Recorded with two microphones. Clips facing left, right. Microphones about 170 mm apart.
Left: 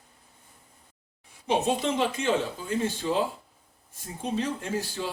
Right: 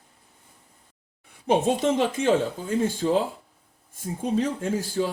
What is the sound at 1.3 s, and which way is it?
Speech, 50° right (ahead or behind).